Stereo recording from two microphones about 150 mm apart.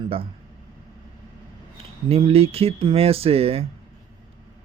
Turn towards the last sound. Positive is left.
turn(degrees=-40)  # may be behind; listen again after turning